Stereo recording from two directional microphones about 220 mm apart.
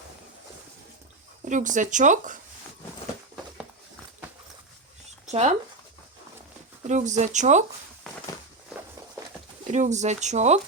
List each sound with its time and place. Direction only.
1.5 s speech: 35° right (ahead or behind)
5.2 s speech: 30° right (ahead or behind)
6.8 s speech: 35° right (ahead or behind)
8.1 s a sound: centre (ahead or behind)
9.7 s speech: 30° right (ahead or behind)